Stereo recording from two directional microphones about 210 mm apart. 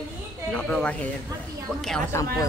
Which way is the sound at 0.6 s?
5° left (ahead or behind).